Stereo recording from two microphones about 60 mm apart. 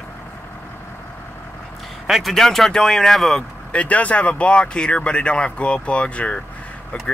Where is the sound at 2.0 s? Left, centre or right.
Centre.